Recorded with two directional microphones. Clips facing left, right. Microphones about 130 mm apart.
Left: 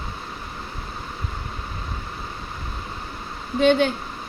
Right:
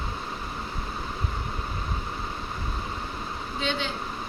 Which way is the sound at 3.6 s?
55° left (ahead or behind).